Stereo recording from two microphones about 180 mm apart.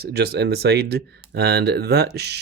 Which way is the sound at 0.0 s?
65° right (ahead or behind).